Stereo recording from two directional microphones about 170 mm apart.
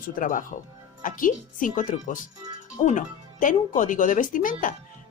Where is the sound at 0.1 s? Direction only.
50° left (ahead or behind).